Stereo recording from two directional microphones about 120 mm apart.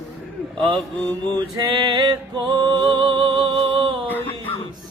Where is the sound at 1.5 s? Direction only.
35° right (ahead or behind).